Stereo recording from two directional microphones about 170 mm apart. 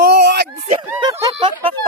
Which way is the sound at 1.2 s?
30° right (ahead or behind).